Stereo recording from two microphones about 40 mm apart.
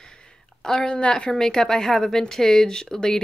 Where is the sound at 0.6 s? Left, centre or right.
Centre.